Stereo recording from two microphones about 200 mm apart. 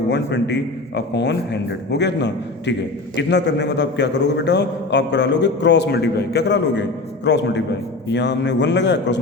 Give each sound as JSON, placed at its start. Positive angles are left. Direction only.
{"t": 0.1, "sound": "a man's voice", "side_deg": 60}